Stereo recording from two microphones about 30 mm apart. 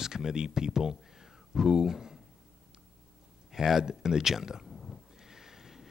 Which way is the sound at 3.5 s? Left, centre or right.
Centre.